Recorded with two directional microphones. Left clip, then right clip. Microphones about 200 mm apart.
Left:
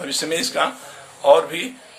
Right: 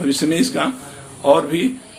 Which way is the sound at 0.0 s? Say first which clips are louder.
Right 4 dB; 10° left (ahead or behind).